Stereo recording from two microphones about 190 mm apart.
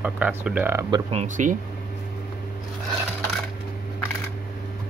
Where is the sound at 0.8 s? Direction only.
25° right (ahead or behind).